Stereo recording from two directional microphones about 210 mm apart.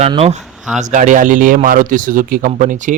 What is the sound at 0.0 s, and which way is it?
Speech, 30° right (ahead or behind).